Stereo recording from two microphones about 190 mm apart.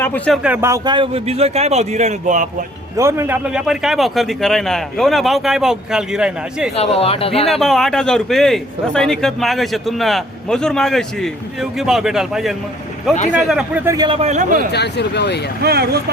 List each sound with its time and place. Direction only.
0.0 s speech: 10° left (ahead or behind)
0.4 s a man's voice: 10° right (ahead or behind); by 2.5 s 40° right (ahead or behind)
3.0 s a man's voice: 15° right (ahead or behind)
6.7 s speech: 30° left (ahead or behind)
7.6 s a man's voice: centre (ahead or behind)
13.8 s a man's voice: 20° right (ahead or behind)
14.2 s a man's voice: 40° right (ahead or behind)
14.7 s speech: 60° left (ahead or behind)
15.6 s speech: 55° right (ahead or behind)